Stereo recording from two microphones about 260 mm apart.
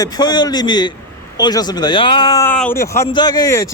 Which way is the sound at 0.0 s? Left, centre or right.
Centre.